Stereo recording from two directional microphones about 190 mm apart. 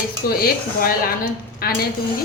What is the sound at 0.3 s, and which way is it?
A woman's voice, 50° left (ahead or behind).